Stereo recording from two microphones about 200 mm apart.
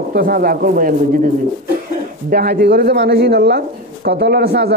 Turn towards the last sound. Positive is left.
turn(degrees=-55)  # may be behind; listen again after turning